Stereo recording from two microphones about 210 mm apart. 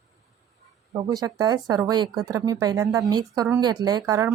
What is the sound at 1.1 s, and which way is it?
Speech, 20° right (ahead or behind).